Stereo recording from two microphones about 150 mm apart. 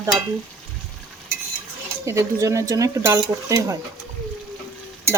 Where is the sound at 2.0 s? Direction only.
20° right (ahead or behind).